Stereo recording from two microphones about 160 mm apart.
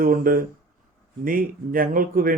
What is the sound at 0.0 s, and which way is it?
Speech, 60° right (ahead or behind).